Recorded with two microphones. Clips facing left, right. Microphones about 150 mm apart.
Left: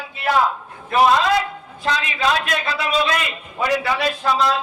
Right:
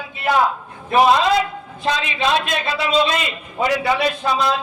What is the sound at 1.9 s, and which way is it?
A man's voice, 25° right (ahead or behind).